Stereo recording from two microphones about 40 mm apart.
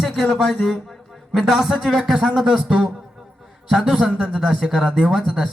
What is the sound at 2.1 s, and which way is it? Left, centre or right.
Speech, right.